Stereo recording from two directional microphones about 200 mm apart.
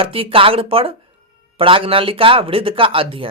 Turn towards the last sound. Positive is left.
turn(degrees=-25)  # may be behind; listen again after turning